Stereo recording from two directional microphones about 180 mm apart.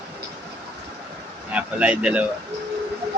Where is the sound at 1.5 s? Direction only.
5° right (ahead or behind).